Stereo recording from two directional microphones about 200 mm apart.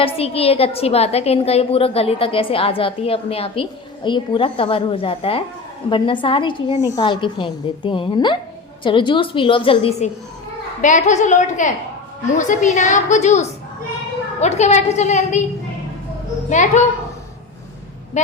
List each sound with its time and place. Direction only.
0.0 s a woman's voice: 30° left (ahead or behind)
10.8 s a woman's voice: 40° left (ahead or behind)
16.5 s a woman's voice: 35° left (ahead or behind)